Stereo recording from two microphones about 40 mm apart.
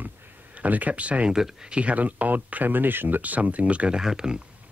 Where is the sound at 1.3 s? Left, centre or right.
Centre.